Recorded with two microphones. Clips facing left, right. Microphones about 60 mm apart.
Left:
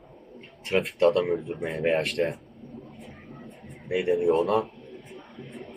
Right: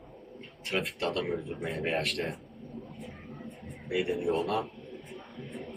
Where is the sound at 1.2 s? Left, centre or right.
Centre.